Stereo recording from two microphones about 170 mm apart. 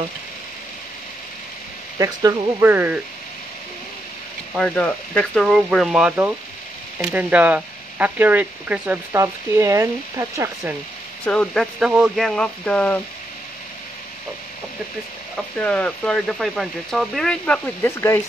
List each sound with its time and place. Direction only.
2.0 s speech: 25° right (ahead or behind)
2.6 s speech: 10° right (ahead or behind)
4.6 s speech: 5° left (ahead or behind); by 10.8 s 15° right (ahead or behind)
11.2 s speech: 5° left (ahead or behind)
15.3 s speech: 5° left (ahead or behind)